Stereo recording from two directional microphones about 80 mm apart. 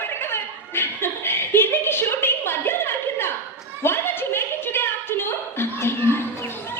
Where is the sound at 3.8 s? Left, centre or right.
Left.